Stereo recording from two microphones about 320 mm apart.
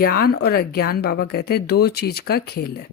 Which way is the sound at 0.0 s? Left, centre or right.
Left.